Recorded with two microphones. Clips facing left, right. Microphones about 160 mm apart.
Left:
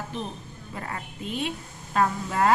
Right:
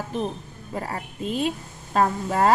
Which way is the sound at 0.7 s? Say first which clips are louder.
Right 5 dB; 35° right (ahead or behind).